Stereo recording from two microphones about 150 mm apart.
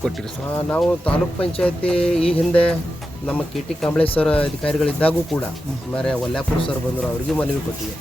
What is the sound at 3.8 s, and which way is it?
Speech, 10° left (ahead or behind).